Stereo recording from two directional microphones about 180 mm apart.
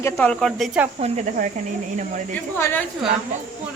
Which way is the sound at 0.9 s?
40° right (ahead or behind).